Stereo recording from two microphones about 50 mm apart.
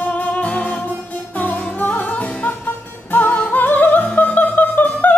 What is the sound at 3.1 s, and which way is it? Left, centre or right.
Music, left.